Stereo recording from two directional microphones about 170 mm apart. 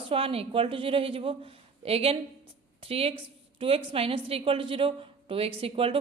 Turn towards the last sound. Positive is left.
turn(degrees=-35)  # may be behind; listen again after turning